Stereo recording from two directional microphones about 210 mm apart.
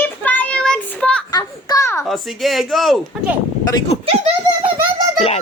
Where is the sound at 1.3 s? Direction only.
15° left (ahead or behind).